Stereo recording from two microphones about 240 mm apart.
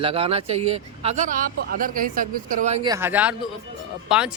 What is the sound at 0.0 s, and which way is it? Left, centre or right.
Speech, right.